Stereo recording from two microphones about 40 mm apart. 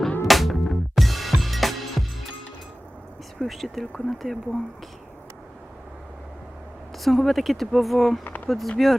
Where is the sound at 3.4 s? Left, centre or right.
Centre.